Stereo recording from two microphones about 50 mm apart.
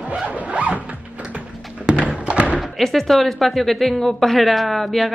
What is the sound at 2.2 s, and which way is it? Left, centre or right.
Thump, right.